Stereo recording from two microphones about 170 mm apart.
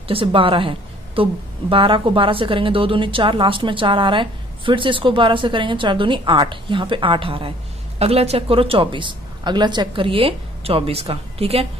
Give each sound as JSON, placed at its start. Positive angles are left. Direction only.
{"t": 0.1, "sound": "a woman's voice", "side_deg": -30}